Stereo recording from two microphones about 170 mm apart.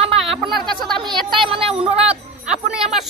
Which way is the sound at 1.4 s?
30° right (ahead or behind).